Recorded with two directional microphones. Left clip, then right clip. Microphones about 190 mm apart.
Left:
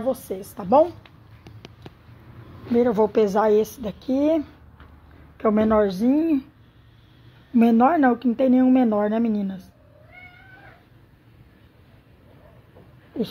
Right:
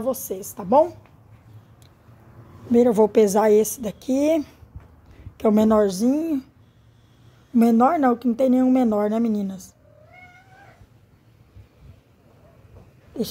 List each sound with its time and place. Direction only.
0.0 s a woman's voice: 10° right (ahead or behind)
2.7 s a woman's voice: 40° right (ahead or behind)
7.5 s a woman's voice: 25° right (ahead or behind)